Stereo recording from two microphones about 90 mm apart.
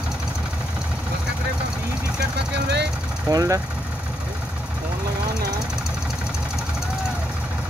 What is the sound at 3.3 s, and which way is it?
Speech, 40° right (ahead or behind).